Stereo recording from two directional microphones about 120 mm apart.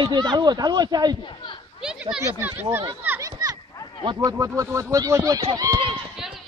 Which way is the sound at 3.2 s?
30° right (ahead or behind).